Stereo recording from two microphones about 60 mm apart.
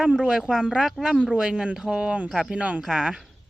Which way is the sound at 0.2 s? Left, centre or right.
Centre.